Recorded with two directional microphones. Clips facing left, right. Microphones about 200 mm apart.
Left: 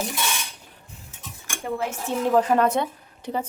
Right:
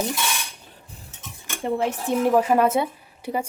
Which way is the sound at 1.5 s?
25° right (ahead or behind).